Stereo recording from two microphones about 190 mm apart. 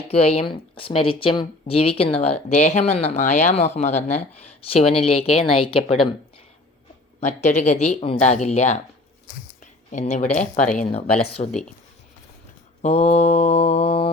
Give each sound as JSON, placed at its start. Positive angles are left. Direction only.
{"t": 0.1, "sound": "speech", "side_deg": 35}
{"t": 7.2, "sound": "speech", "side_deg": 35}
{"t": 9.9, "sound": "speech", "side_deg": 35}
{"t": 11.4, "sound": "speech", "side_deg": 30}
{"t": 12.8, "sound": "speech", "side_deg": 35}